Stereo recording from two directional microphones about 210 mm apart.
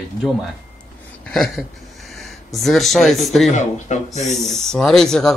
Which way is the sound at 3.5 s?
35° left (ahead or behind).